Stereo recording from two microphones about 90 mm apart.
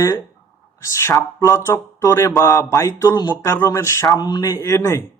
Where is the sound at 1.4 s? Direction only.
35° left (ahead or behind).